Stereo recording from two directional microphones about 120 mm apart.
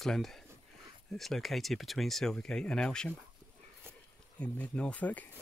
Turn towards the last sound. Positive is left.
turn(degrees=10)  # may be behind; listen again after turning